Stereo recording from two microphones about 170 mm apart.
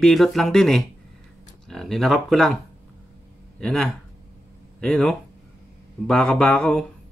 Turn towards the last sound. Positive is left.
turn(degrees=5)  # may be behind; listen again after turning